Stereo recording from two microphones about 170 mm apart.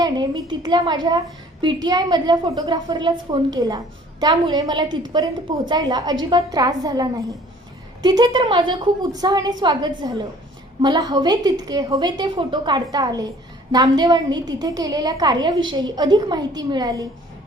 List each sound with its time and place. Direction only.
0.0 s a woman's voice: 25° right (ahead or behind)